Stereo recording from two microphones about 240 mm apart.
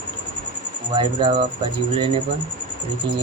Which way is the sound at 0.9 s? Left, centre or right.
Centre.